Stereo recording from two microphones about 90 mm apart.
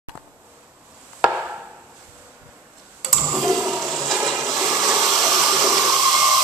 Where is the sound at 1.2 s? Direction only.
10° right (ahead or behind).